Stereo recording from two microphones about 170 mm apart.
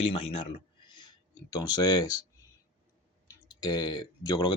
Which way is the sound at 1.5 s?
25° left (ahead or behind).